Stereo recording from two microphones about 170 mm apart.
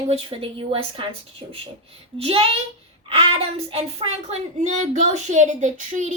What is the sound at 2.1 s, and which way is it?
Speech, 35° right (ahead or behind).